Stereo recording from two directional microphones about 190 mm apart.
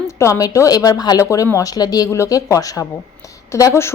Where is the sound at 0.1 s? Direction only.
15° left (ahead or behind).